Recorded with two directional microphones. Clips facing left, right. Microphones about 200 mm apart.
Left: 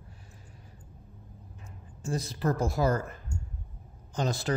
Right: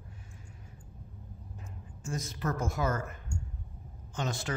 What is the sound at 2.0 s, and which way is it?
A man's voice, 35° left (ahead or behind).